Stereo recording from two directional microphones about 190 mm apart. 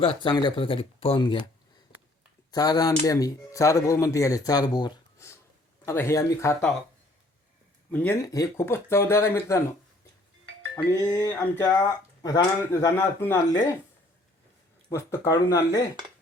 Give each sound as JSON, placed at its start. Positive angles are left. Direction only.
{"t": 0.0, "sound": "speech", "side_deg": 25}
{"t": 2.5, "sound": "speech", "side_deg": 20}
{"t": 7.9, "sound": "speech", "side_deg": 10}
{"t": 10.9, "sound": "speech", "side_deg": 20}
{"t": 14.8, "sound": "speech", "side_deg": 15}